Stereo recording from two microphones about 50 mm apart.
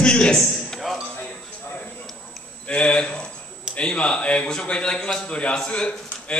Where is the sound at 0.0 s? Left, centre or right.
Centre.